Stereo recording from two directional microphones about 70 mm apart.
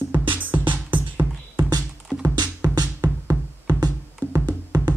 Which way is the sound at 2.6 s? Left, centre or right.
Right.